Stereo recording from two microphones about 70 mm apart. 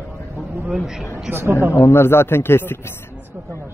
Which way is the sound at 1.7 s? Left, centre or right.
Left.